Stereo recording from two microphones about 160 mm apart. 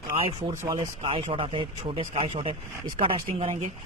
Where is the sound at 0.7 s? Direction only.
30° right (ahead or behind).